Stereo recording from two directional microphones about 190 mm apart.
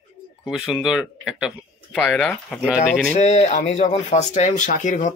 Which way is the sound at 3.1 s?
35° left (ahead or behind).